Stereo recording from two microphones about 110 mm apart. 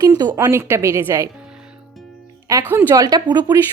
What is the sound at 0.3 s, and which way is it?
Speech, 25° right (ahead or behind).